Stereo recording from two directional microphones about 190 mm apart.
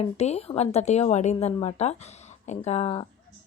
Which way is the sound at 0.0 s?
35° left (ahead or behind).